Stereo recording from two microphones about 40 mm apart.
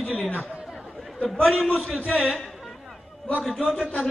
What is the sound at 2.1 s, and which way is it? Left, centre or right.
A man's voice, centre.